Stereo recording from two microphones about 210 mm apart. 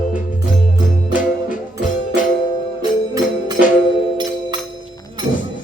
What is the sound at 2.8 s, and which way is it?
Music, 20° right (ahead or behind).